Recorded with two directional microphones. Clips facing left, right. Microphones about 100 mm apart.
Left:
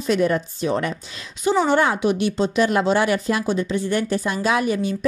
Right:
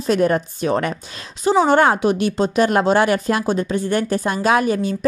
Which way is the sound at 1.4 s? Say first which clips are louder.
Right 4 dB; 40° right (ahead or behind).